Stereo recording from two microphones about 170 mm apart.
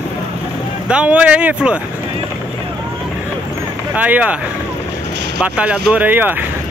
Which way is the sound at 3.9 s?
10° right (ahead or behind).